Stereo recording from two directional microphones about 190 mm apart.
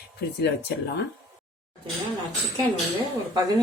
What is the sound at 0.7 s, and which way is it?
Speech, 60° left (ahead or behind).